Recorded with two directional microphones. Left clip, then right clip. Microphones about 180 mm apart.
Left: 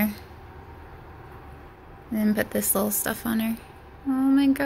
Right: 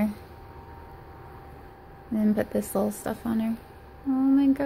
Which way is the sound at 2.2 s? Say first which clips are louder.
Left 1 dB; 15° right (ahead or behind).